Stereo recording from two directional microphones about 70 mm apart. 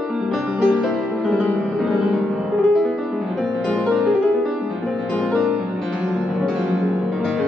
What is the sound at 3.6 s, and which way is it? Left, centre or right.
Music, centre.